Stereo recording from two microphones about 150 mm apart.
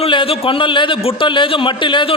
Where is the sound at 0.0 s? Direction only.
35° left (ahead or behind).